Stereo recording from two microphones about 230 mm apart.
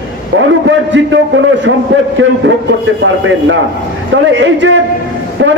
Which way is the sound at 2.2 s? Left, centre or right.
Right.